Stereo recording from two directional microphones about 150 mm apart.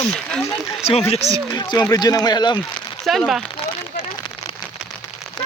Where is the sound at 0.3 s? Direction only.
5° left (ahead or behind).